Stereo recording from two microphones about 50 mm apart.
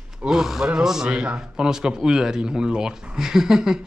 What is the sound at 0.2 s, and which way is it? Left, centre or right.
Speech, centre.